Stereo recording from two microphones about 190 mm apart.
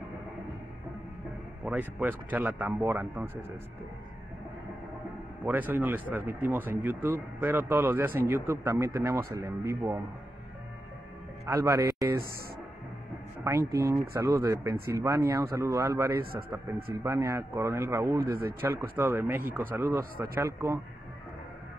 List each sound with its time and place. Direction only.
1.6 s speech: 5° right (ahead or behind)
5.4 s speech: 10° right (ahead or behind)
11.4 s speech: 15° right (ahead or behind)
13.4 s speech: 15° right (ahead or behind)